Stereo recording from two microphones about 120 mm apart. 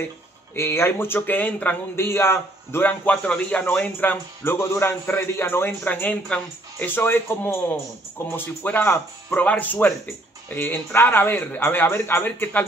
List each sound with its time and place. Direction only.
0.6 s speech: 20° left (ahead or behind)